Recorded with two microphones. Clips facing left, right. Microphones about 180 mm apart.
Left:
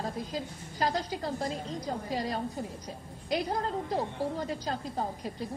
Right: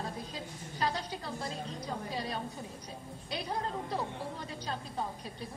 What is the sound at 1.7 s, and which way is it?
Speech, 90° left.